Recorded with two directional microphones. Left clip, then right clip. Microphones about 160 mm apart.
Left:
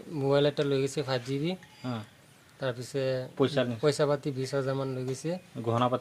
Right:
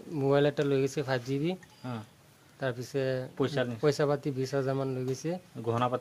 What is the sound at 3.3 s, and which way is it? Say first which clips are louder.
Speech: left 4 dB; 70° left (ahead or behind).